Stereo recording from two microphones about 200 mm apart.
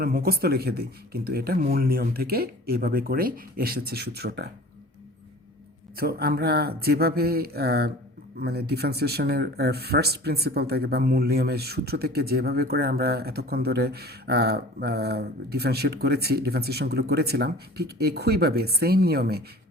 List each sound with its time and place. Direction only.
0.0 s speech: 50° right (ahead or behind)
6.0 s speech: 50° right (ahead or behind)